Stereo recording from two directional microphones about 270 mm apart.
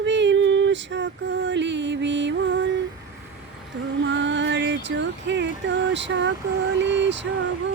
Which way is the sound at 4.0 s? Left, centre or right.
Right.